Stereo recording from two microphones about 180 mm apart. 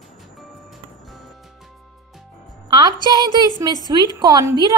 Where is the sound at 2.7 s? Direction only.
25° right (ahead or behind).